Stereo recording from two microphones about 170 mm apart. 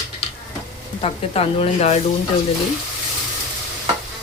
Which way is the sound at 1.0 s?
35° left (ahead or behind).